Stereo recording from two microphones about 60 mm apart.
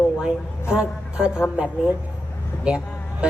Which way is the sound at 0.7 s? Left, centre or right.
Centre.